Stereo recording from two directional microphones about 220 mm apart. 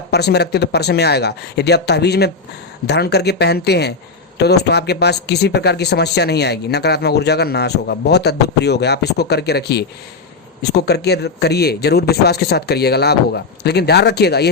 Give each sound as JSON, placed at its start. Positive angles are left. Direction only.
{"t": 0.1, "sound": "speech", "side_deg": 50}